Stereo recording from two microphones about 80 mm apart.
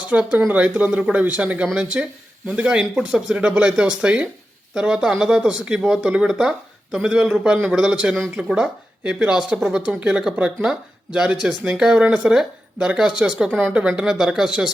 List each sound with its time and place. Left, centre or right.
0.1 s speech: centre